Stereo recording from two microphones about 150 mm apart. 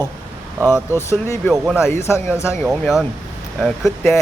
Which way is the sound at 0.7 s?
15° left (ahead or behind).